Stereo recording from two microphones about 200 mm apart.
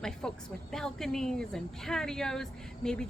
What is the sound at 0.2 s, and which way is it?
Speech, 5° left (ahead or behind).